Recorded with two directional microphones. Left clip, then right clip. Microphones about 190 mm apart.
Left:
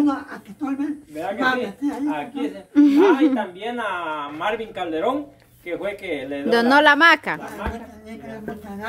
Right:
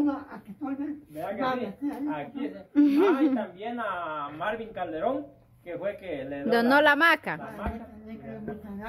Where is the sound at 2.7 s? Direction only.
Centre (ahead or behind).